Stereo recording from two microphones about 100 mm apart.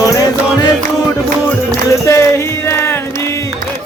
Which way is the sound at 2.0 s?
25° left (ahead or behind).